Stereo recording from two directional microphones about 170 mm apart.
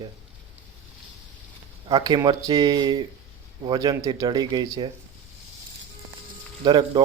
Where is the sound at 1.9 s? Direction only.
25° right (ahead or behind).